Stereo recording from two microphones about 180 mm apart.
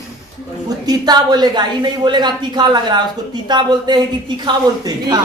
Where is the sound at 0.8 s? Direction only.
20° right (ahead or behind).